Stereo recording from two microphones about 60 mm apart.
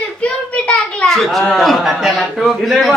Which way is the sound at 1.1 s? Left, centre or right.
Centre.